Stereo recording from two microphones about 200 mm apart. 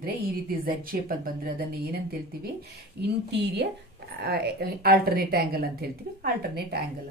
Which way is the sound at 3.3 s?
55° right (ahead or behind).